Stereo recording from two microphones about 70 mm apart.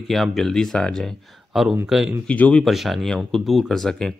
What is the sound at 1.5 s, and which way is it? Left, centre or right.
Speech, centre.